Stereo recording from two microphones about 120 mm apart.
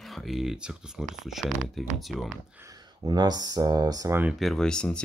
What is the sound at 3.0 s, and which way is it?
Speech, 35° right (ahead or behind).